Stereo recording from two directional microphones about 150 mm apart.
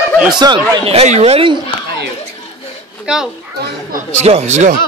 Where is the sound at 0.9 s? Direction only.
45° right (ahead or behind).